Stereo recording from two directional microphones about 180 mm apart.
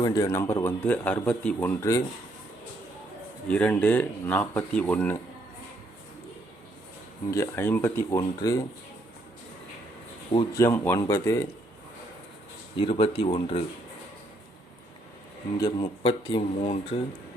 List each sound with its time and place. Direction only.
0.0 s speech: 20° left (ahead or behind)
3.5 s speech: 5° left (ahead or behind)
7.3 s speech: 15° left (ahead or behind)
10.6 s speech: 15° left (ahead or behind)
12.7 s speech: 30° left (ahead or behind)
15.5 s speech: 20° left (ahead or behind)
16.0 s speech: 35° left (ahead or behind)